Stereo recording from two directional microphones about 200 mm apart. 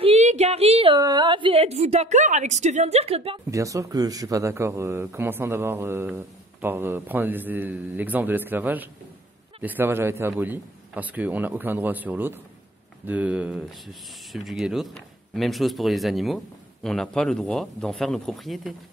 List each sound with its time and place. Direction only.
0.0 s a woman's voice: 35° right (ahead or behind)
3.4 s speech: 15° right (ahead or behind)